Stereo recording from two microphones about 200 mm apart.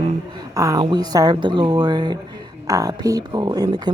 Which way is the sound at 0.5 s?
15° right (ahead or behind).